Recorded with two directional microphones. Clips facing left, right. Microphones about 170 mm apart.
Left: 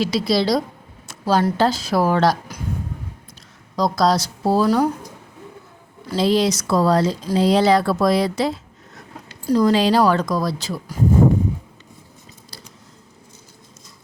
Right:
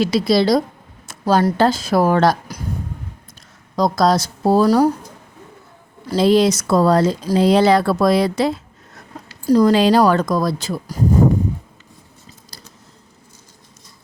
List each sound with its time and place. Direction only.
0.0 s speech: 50° right (ahead or behind)
3.8 s speech: 50° right (ahead or behind)
6.1 s speech: 55° right (ahead or behind)
9.5 s speech: 45° right (ahead or behind)
12.5 s a sound: 40° right (ahead or behind)